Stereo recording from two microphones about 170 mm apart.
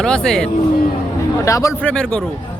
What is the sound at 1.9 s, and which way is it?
Speech, 5° left (ahead or behind).